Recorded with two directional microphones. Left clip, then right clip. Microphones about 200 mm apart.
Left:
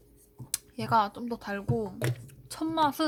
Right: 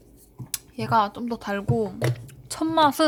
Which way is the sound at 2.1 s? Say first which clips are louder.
Right 8 dB; 5° right (ahead or behind).